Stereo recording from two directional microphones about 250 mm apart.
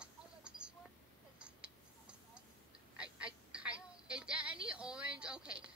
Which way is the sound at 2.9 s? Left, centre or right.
Centre.